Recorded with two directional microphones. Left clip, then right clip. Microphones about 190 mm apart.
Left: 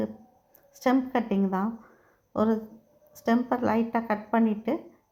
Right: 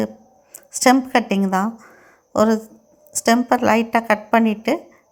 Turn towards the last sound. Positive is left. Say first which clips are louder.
# right 9 dB
turn(degrees=-25)  # may be behind; listen again after turning